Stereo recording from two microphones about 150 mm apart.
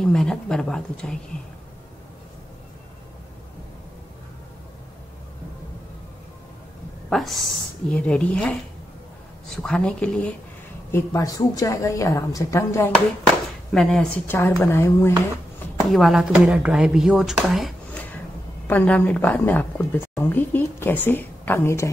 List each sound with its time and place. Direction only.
0.0 s speech: 5° left (ahead or behind)
7.1 s a woman's voice: centre (ahead or behind)
10.9 s a woman's voice: 20° left (ahead or behind)
13.7 s a woman's voice: 5° left (ahead or behind)
15.9 s speech: centre (ahead or behind)
18.7 s a woman's voice: 10° left (ahead or behind)